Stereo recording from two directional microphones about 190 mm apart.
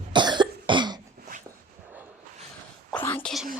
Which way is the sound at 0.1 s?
25° right (ahead or behind).